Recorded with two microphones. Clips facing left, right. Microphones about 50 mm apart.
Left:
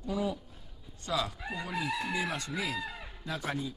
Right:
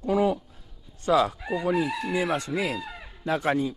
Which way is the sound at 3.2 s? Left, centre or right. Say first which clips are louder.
Right 11 dB; right.